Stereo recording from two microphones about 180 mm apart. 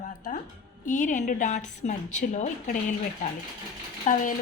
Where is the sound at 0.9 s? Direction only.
45° left (ahead or behind).